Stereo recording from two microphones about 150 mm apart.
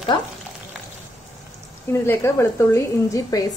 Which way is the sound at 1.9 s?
20° left (ahead or behind).